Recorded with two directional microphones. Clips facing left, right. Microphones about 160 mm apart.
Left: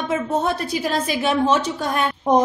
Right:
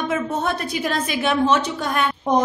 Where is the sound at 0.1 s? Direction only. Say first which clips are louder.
Left 5 dB; 35° left (ahead or behind).